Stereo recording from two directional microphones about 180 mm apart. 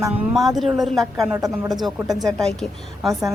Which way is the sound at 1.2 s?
15° right (ahead or behind).